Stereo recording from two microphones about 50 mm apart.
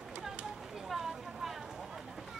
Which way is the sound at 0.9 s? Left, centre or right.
Centre.